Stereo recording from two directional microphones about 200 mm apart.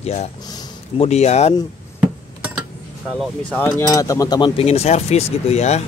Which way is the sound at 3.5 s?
15° left (ahead or behind).